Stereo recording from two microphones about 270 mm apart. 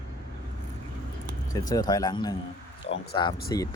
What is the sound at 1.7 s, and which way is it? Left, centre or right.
Speech, centre.